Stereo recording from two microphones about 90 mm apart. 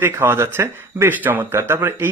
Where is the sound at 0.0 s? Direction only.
25° right (ahead or behind).